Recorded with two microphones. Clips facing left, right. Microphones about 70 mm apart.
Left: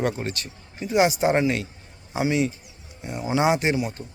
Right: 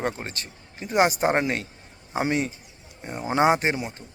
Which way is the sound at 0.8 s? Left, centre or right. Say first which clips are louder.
Left 1 dB; right.